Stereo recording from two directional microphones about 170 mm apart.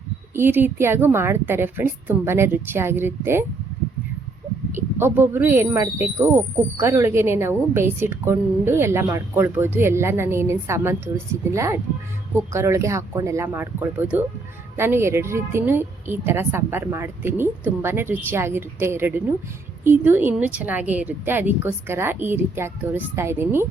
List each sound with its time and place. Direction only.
0.3 s speech: 10° right (ahead or behind)
4.7 s speech: 15° right (ahead or behind)